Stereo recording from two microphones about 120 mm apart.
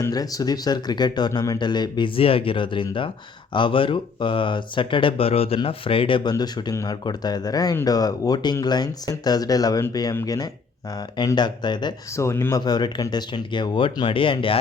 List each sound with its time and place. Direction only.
0.0 s speech: 30° left (ahead or behind)
6.3 s speech: 30° left (ahead or behind)
12.1 s speech: 25° left (ahead or behind); by 14.6 s 45° left (ahead or behind)